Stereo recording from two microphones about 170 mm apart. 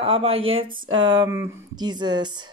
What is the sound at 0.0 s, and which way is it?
Speech, 35° right (ahead or behind).